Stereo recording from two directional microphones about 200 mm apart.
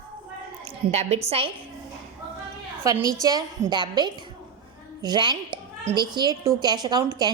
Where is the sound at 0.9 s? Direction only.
35° right (ahead or behind).